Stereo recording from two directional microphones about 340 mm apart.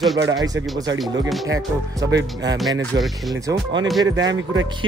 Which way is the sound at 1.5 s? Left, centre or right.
Centre.